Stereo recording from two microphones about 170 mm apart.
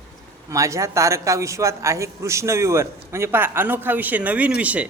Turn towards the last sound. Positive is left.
turn(degrees=-10)  # may be behind; listen again after turning